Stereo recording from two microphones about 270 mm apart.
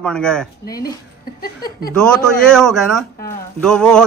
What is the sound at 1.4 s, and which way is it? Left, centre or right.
Speech, left.